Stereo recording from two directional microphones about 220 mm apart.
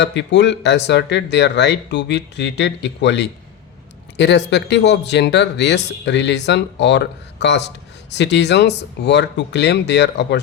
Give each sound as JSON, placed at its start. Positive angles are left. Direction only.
{"t": 0.0, "sound": "speech", "side_deg": 55}